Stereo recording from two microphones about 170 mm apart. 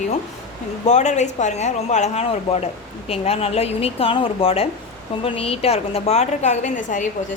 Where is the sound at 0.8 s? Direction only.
45° left (ahead or behind).